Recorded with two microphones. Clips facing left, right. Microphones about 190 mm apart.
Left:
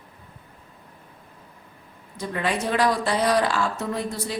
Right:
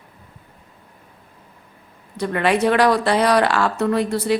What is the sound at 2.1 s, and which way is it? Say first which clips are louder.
Speech: right 7 dB; 70° right (ahead or behind).